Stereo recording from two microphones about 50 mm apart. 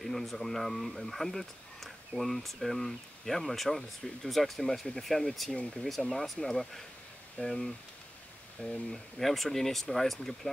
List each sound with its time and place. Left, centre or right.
0.0 s speech: centre
8.6 s speech: centre
8.9 s speech: centre